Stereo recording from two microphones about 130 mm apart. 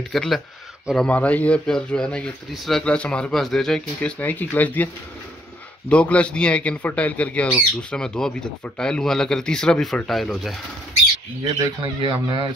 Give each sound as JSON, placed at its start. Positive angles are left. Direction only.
{"t": 0.1, "sound": "a man's voice", "side_deg": 0}
{"t": 5.9, "sound": "a man's voice", "side_deg": 10}
{"t": 11.8, "sound": "speech", "side_deg": -35}